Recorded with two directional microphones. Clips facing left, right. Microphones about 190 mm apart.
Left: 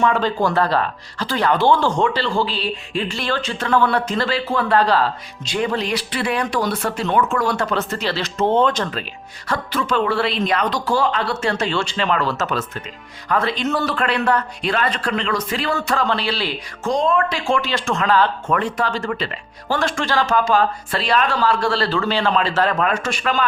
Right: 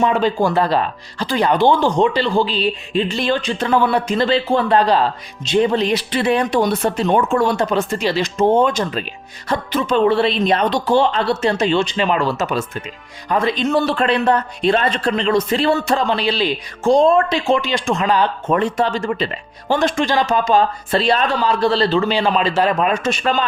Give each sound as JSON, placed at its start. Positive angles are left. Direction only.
{"t": 0.0, "sound": "speech", "side_deg": -15}
{"t": 16.8, "sound": "speech", "side_deg": -30}